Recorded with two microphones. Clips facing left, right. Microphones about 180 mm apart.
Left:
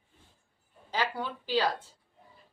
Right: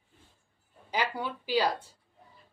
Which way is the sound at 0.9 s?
15° right (ahead or behind).